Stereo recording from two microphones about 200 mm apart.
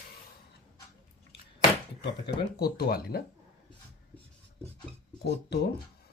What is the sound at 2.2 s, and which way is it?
Speech, 55° left (ahead or behind).